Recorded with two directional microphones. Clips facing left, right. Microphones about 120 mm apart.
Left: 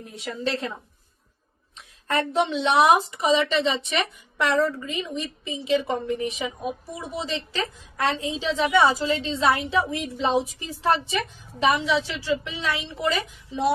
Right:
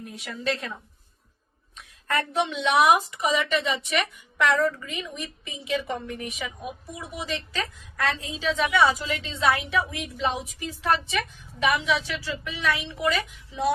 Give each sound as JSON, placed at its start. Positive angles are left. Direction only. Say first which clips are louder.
{"t": 0.0, "sound": "a woman's voice", "louder": "left 2 dB", "side_deg": 30}
{"t": 2.0, "sound": "a woman's voice", "louder": "left 3 dB", "side_deg": 25}